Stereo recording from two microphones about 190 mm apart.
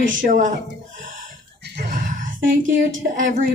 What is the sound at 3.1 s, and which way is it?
Speech, 40° right (ahead or behind).